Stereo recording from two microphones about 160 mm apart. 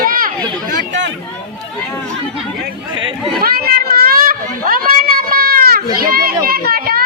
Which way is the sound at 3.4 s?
70° right (ahead or behind).